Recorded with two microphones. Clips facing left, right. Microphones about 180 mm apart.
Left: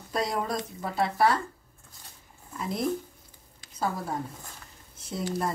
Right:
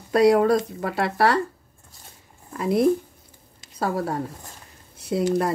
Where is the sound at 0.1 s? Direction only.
70° right (ahead or behind).